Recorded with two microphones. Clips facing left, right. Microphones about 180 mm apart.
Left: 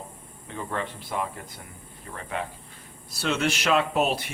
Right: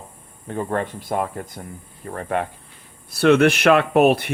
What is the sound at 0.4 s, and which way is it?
Speech, 50° right (ahead or behind).